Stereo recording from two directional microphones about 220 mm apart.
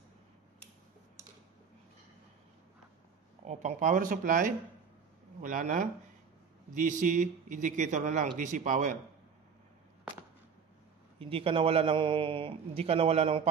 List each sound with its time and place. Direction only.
3.4 s a man's voice: 35° right (ahead or behind)
11.1 s a man's voice: 25° right (ahead or behind)